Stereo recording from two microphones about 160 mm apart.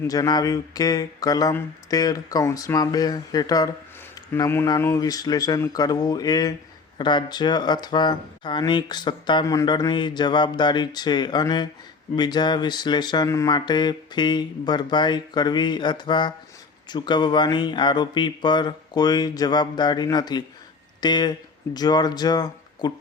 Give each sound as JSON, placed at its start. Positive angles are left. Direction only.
{"t": 0.0, "sound": "speech", "side_deg": 20}